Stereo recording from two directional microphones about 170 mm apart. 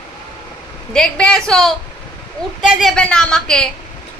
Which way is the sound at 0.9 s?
5° left (ahead or behind).